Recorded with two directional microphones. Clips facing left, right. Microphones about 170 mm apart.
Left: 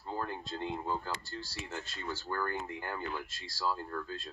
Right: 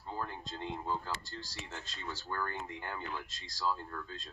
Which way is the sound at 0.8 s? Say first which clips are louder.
Left 1 dB; 10° left (ahead or behind).